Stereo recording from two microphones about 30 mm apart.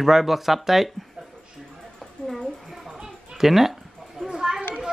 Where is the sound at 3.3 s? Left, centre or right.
Centre.